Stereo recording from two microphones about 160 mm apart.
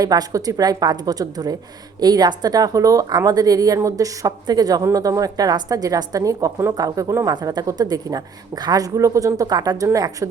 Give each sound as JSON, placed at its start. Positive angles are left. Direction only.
{"t": 0.0, "sound": "a woman's voice", "side_deg": -25}